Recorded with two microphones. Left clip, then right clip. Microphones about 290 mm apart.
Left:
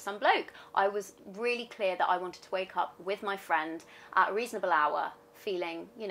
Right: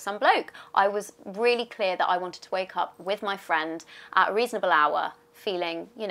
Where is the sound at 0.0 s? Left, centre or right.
Right.